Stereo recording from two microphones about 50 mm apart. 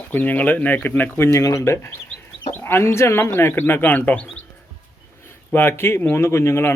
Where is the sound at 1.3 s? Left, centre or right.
Left.